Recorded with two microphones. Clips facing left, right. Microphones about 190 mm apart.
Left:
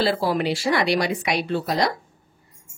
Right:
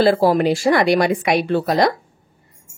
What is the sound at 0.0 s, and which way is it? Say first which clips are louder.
Speech: right 7 dB; 45° right (ahead or behind).